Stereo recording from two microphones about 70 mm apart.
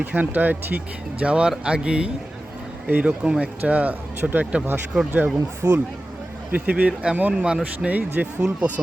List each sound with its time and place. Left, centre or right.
0.0 s speech: right